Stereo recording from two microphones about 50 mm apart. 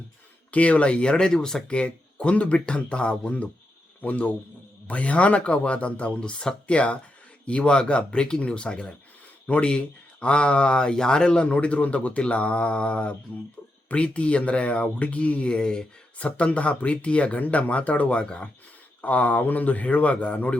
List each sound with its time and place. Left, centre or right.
0.5 s a man's voice: left
16.1 s a man's voice: left